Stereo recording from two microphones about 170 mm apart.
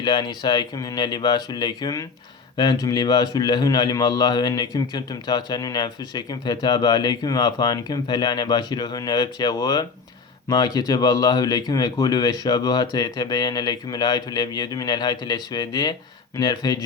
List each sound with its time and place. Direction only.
0.0 s speech: 25° left (ahead or behind)